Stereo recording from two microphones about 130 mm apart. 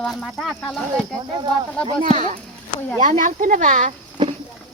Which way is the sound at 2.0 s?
75° right (ahead or behind).